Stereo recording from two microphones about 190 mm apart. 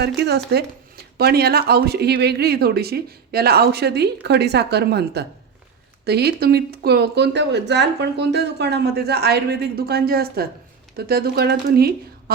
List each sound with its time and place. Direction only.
0.2 s speech: 60° right (ahead or behind)